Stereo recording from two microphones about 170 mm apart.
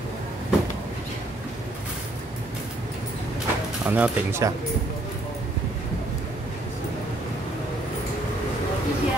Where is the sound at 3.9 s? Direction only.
10° right (ahead or behind).